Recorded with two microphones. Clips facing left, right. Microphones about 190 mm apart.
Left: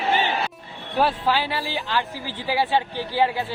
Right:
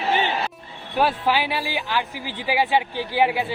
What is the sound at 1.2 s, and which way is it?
Speech, 15° right (ahead or behind).